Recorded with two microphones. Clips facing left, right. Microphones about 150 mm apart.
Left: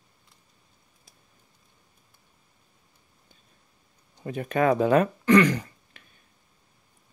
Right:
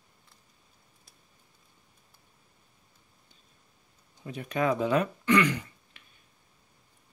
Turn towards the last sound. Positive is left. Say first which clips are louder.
# left 5 dB
turn(degrees=40)  # may be behind; listen again after turning